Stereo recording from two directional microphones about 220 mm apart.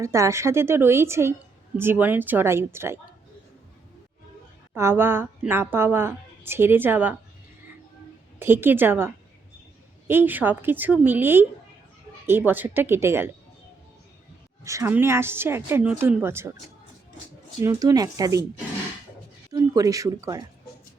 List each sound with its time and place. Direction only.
0.0 s a woman's voice: 15° right (ahead or behind)
4.7 s a woman's voice: 10° right (ahead or behind)
8.4 s a woman's voice: 10° right (ahead or behind)
14.6 s a woman's voice: 15° right (ahead or behind)
17.6 s a woman's voice: 15° right (ahead or behind)
19.5 s speech: 15° right (ahead or behind)